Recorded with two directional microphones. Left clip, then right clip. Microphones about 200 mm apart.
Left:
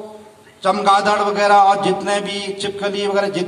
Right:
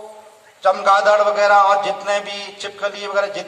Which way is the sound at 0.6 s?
40° left (ahead or behind).